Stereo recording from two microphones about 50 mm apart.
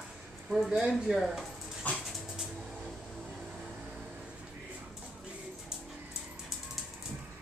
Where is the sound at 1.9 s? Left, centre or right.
Left.